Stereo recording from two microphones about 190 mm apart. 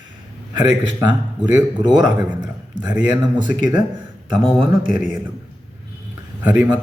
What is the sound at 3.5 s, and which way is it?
Speech, 50° left (ahead or behind).